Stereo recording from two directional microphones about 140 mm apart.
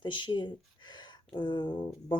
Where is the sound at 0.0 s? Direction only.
35° left (ahead or behind).